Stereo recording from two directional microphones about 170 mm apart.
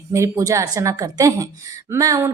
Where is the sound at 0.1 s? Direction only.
15° right (ahead or behind).